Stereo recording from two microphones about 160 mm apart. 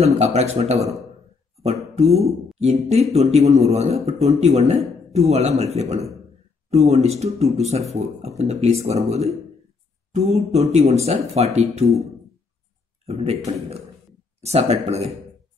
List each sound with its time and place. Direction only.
0.0 s a man's voice: 45° right (ahead or behind)
2.6 s a man's voice: 40° right (ahead or behind)
13.0 s speech: 40° right (ahead or behind)
14.4 s speech: 40° right (ahead or behind)